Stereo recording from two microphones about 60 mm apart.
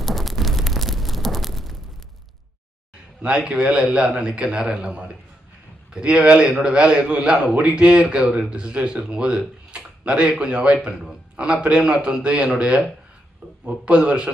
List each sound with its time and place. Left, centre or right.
0.0 s a sound: centre
3.2 s speech: centre
13.8 s speech: centre